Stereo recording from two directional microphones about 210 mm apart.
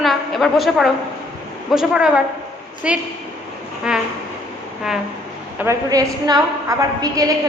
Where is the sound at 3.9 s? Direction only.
5° right (ahead or behind).